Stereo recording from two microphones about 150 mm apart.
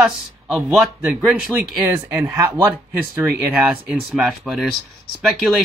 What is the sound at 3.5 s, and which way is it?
Speech, centre (ahead or behind).